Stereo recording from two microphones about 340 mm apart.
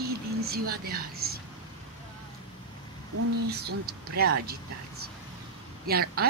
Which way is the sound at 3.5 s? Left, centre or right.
Right.